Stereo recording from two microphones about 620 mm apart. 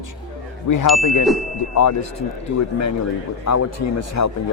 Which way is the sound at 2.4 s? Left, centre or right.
Left.